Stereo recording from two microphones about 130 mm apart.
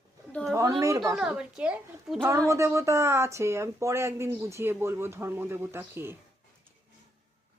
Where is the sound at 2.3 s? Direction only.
25° right (ahead or behind).